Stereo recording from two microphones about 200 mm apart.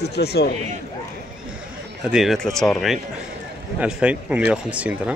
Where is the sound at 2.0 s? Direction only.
Centre (ahead or behind).